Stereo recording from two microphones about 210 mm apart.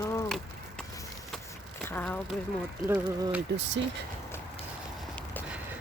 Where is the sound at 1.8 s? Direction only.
10° left (ahead or behind).